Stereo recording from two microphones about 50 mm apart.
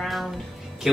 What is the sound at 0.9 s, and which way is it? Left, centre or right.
Speech, centre.